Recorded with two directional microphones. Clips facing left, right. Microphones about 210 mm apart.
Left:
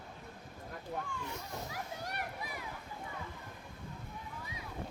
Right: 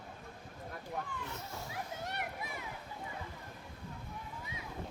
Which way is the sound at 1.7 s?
25° right (ahead or behind).